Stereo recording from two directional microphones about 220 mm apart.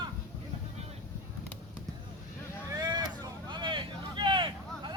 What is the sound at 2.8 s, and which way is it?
Vehicle, 20° right (ahead or behind).